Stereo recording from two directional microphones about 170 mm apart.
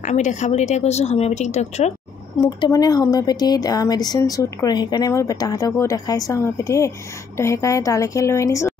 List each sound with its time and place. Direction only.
0.0 s speech: 45° left (ahead or behind)
2.4 s a woman's voice: 25° left (ahead or behind)